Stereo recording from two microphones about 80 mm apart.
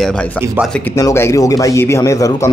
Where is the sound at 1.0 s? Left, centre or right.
Left.